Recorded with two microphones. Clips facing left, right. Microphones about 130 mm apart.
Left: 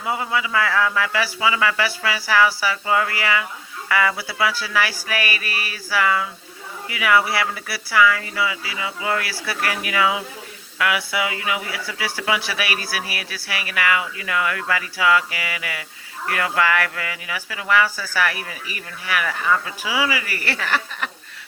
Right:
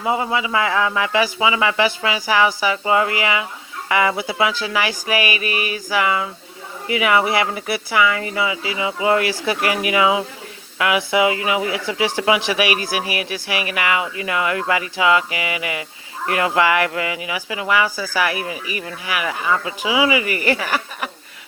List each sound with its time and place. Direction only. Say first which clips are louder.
0.0 s speech: right 3 dB; 25° right (ahead or behind)